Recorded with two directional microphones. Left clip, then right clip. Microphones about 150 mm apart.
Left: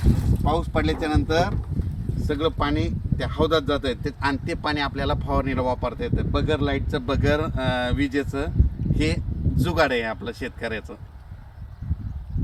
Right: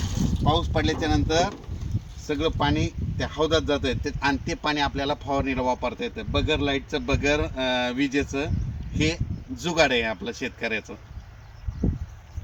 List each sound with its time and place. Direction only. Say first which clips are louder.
0.4 s speech: even; 20° right (ahead or behind)
2.2 s speech: left 1 dB; 30° right (ahead or behind)